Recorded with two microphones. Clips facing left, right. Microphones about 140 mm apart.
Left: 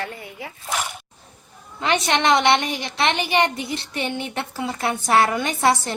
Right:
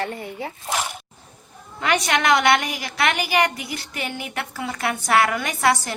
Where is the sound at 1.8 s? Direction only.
25° left (ahead or behind).